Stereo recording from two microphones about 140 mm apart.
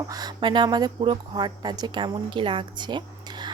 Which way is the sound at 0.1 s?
30° right (ahead or behind).